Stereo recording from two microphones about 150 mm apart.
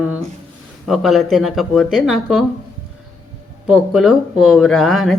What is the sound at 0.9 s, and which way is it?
Speech, centre (ahead or behind).